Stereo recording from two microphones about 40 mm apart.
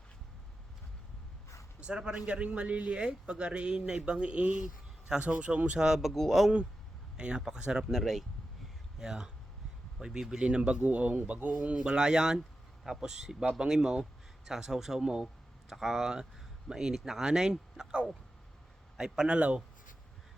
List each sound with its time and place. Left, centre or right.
1.8 s speech: right
3.0 s speech: right
5.8 s speech: centre
6.1 s a man's voice: centre
7.2 s speech: right
7.9 s speech: centre
9.0 s speech: centre
10.8 s speech: right
11.9 s speech: centre
19.4 s speech: right